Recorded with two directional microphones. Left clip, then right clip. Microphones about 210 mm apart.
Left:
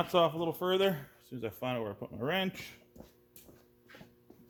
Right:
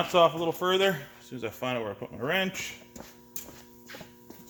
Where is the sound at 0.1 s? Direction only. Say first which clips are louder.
Right 8 dB; 45° left (ahead or behind).